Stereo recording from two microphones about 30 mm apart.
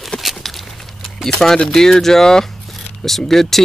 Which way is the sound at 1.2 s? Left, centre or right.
Centre.